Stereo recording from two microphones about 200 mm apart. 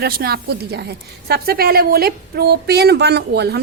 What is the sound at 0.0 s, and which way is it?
A woman's voice, 50° right (ahead or behind).